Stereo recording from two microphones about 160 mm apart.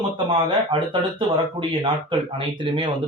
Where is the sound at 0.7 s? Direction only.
30° right (ahead or behind).